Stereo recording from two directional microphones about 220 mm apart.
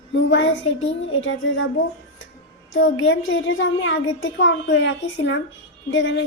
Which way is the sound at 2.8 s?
60° left (ahead or behind).